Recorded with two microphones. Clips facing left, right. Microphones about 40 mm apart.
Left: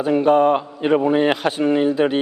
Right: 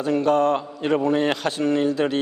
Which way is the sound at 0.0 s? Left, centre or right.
Centre.